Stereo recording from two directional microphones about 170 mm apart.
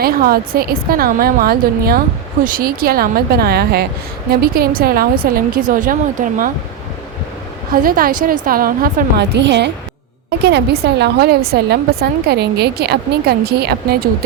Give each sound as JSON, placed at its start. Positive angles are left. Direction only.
{"t": 0.0, "sound": "a woman's voice", "side_deg": -60}
{"t": 7.7, "sound": "a woman's voice", "side_deg": -55}
{"t": 10.2, "sound": "a woman's voice", "side_deg": -75}